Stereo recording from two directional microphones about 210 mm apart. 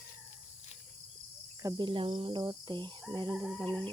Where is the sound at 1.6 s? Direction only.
20° right (ahead or behind).